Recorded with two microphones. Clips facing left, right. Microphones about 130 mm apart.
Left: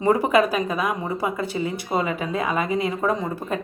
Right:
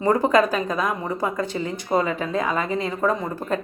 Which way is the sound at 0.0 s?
10° left (ahead or behind).